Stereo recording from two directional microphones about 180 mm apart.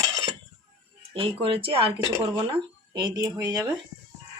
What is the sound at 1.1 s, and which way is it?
Speech, 30° right (ahead or behind).